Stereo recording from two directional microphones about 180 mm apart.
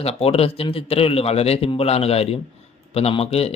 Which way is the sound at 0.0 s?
35° left (ahead or behind).